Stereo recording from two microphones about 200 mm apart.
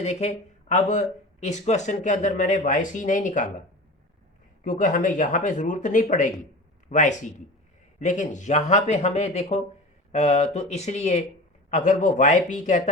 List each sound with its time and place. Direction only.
0.0 s speech: 35° left (ahead or behind)
4.6 s speech: 40° left (ahead or behind)